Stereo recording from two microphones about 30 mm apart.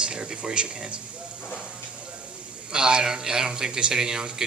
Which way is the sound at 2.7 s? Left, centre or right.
Right.